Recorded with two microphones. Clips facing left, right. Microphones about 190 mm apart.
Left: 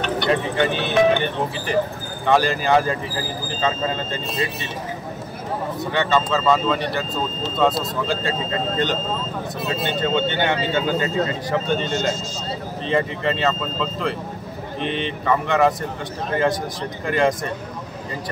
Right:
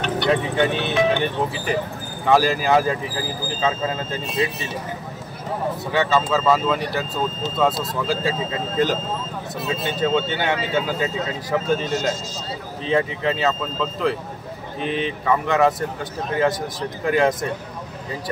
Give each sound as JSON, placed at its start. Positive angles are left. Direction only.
{"t": 0.3, "sound": "speech", "side_deg": 0}
{"t": 5.9, "sound": "speech", "side_deg": -5}
{"t": 17.1, "sound": "speech", "side_deg": 0}